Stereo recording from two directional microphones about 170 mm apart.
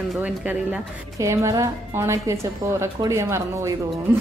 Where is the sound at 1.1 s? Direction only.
15° right (ahead or behind).